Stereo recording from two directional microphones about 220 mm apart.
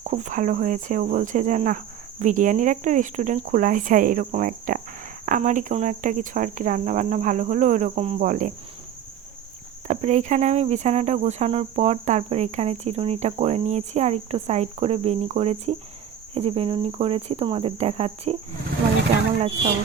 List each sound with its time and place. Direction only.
0.0 s cricket: 35° right (ahead or behind)
9.8 s cricket: 30° right (ahead or behind)